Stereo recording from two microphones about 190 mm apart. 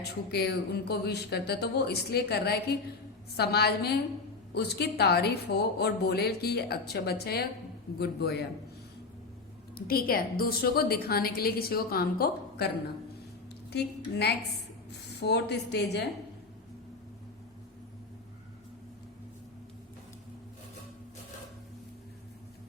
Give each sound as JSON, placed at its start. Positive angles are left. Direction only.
{"t": 0.3, "sound": "a woman's voice", "side_deg": 60}
{"t": 9.7, "sound": "a woman's voice", "side_deg": 50}